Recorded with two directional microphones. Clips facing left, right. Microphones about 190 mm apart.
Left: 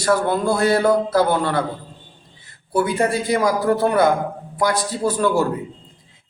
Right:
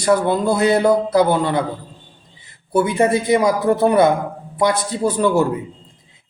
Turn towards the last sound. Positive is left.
turn(degrees=-20)  # may be behind; listen again after turning